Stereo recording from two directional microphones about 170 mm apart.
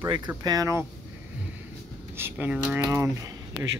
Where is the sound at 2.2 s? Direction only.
10° right (ahead or behind).